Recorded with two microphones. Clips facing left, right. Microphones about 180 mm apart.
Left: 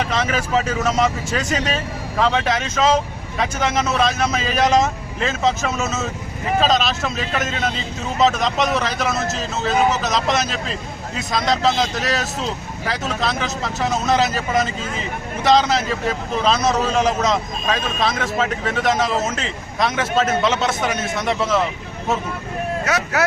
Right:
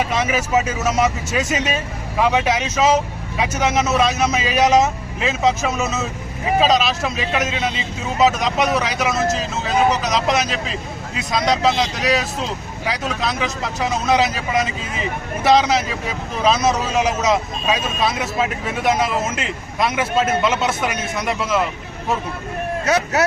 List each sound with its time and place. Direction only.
0.0 s speech: 10° right (ahead or behind)
22.9 s speech: 25° right (ahead or behind)